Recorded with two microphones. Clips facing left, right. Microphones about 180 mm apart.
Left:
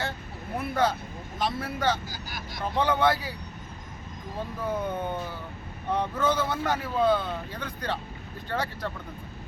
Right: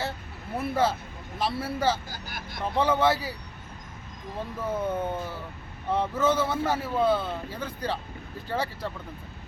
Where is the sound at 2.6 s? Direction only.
5° right (ahead or behind).